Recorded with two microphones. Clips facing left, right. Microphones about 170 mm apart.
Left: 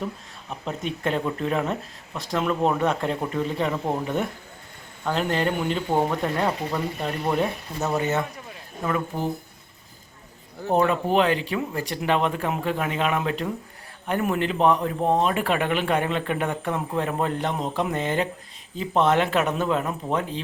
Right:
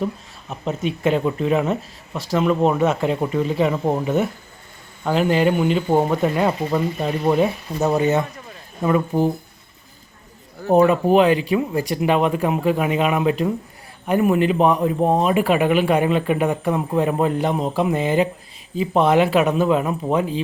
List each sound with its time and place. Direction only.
0.6 s speech: 5° right (ahead or behind)
9.1 s speech: 35° right (ahead or behind)
10.7 s speech: 10° right (ahead or behind)